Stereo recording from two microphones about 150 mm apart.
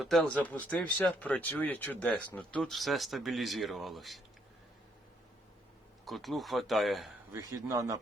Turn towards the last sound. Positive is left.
turn(degrees=-20)  # may be behind; listen again after turning